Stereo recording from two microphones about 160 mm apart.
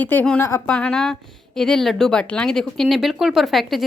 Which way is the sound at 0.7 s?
5° left (ahead or behind).